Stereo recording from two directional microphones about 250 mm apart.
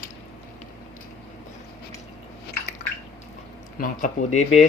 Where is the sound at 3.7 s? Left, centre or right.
Left.